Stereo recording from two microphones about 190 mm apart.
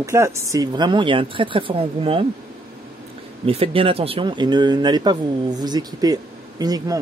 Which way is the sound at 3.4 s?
30° right (ahead or behind).